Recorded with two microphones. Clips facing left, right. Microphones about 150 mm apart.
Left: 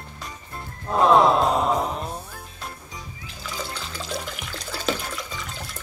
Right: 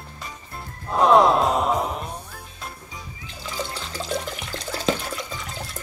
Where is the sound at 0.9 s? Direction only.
Centre (ahead or behind).